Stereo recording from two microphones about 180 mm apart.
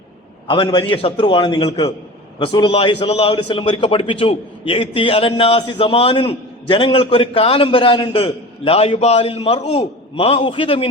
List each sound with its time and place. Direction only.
0.4 s a man's voice: 25° left (ahead or behind)